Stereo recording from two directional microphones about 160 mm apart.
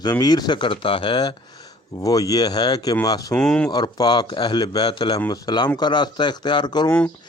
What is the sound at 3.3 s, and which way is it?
Speech, 5° left (ahead or behind).